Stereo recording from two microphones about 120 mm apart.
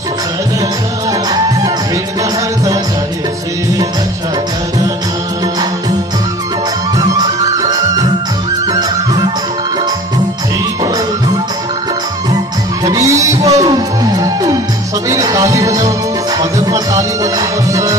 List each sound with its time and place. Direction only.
8.7 s music: 35° right (ahead or behind)
12.8 s a sound: 25° right (ahead or behind)
13.7 s music: 30° right (ahead or behind)